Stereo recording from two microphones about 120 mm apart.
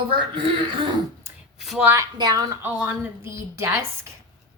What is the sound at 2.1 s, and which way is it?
Speech, 35° right (ahead or behind).